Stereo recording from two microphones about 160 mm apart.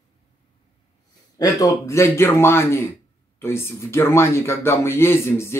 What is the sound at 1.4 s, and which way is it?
Speech, 20° left (ahead or behind).